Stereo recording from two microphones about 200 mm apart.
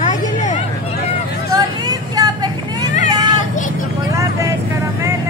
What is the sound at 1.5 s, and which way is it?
Vehicle, 20° right (ahead or behind).